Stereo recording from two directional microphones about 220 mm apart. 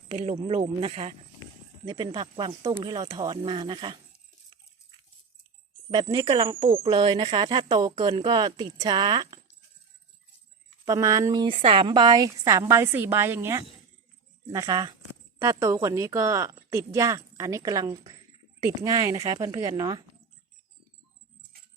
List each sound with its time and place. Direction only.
0.1 s speech: 30° right (ahead or behind)
5.9 s speech: 20° right (ahead or behind)
10.8 s a woman's voice: 15° right (ahead or behind)